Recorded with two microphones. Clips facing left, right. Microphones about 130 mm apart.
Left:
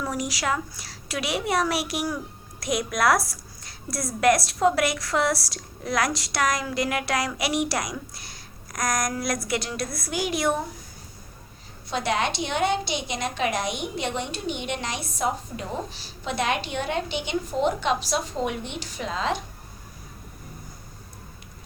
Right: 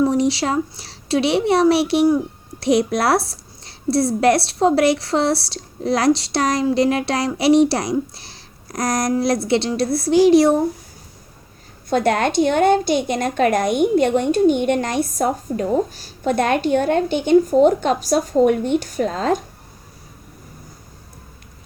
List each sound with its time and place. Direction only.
0.0 s speech: 30° right (ahead or behind)
11.9 s a woman's voice: 50° right (ahead or behind)